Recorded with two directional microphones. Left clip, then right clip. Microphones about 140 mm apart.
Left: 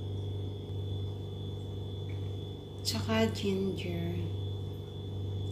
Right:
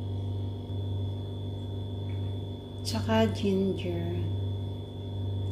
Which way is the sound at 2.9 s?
30° right (ahead or behind).